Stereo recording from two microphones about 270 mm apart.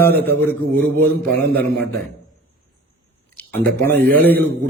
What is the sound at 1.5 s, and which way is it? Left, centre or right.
Speech, right.